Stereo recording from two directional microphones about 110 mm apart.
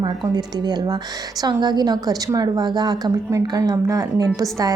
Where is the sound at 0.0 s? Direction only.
40° right (ahead or behind).